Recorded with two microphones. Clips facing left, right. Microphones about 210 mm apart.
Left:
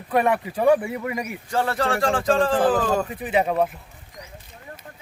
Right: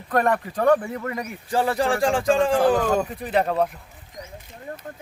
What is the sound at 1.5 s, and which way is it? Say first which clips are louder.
Speech: right 2 dB; 15° right (ahead or behind).